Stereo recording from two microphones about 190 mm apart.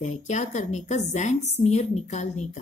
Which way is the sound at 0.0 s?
40° left (ahead or behind).